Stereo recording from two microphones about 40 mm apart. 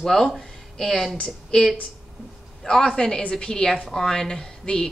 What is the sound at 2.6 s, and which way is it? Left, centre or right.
A woman's voice, centre.